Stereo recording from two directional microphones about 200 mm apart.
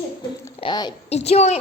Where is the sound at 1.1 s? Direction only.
35° left (ahead or behind).